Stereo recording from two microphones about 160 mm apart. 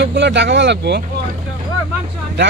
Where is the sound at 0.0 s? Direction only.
90° right.